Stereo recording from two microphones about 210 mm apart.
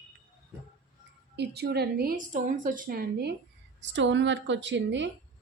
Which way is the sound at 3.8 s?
60° right (ahead or behind).